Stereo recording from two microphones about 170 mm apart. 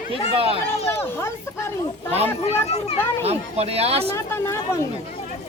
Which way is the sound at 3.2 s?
40° right (ahead or behind).